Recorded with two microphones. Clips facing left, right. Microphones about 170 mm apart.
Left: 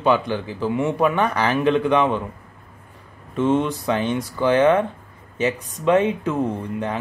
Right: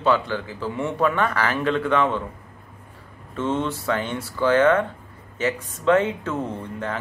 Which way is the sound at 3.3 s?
15° left (ahead or behind).